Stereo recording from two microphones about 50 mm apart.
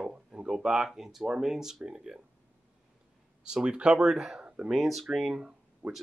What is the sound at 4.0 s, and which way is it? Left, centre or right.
Speech, centre.